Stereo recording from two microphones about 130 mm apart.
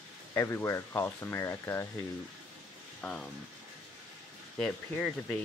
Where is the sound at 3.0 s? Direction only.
5° left (ahead or behind).